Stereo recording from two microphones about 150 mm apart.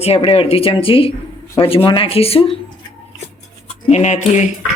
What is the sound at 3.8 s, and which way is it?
Speech, 50° left (ahead or behind).